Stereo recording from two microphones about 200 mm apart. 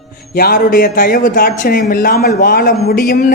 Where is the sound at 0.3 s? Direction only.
45° left (ahead or behind).